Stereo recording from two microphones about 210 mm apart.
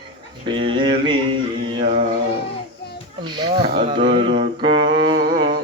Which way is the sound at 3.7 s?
25° right (ahead or behind).